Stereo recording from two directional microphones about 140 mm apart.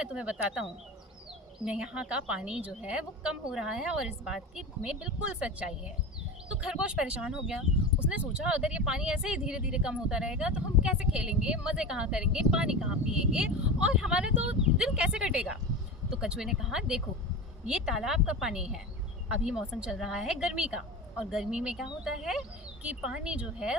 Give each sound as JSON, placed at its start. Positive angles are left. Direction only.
{"t": 0.0, "sound": "a woman's voice", "side_deg": -5}